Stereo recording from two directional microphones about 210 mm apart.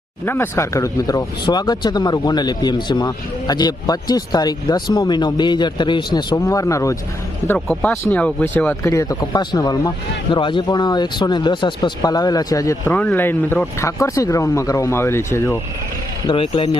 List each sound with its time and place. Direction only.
0.3 s speech: 15° left (ahead or behind)
16.2 s speech: 25° left (ahead or behind)